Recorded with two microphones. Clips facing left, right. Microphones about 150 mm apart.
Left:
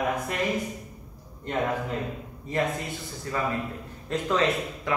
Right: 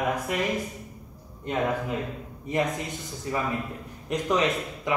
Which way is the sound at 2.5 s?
20° right (ahead or behind).